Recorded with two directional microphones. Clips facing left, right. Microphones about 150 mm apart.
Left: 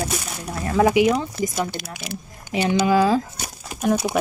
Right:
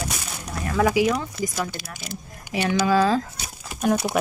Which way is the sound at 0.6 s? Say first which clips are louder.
Left 3 dB; 30° left (ahead or behind).